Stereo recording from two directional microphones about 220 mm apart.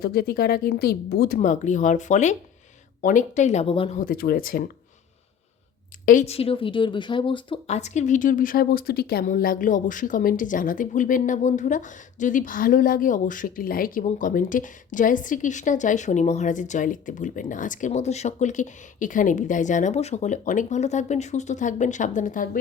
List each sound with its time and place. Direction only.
0.0 s a woman's voice: 45° left (ahead or behind); by 4.0 s 25° left (ahead or behind)
4.0 s a woman's voice: 45° left (ahead or behind)
6.1 s a woman's voice: 30° left (ahead or behind)